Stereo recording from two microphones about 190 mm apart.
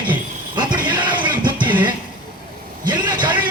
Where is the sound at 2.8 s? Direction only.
25° right (ahead or behind).